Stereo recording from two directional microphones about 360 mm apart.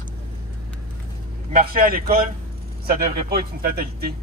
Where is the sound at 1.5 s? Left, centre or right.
Right.